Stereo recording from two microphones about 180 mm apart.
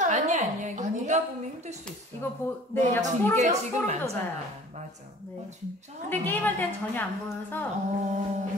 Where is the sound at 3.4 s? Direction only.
40° right (ahead or behind).